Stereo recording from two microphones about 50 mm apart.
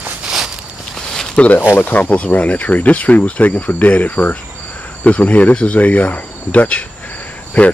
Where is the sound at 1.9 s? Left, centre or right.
Left.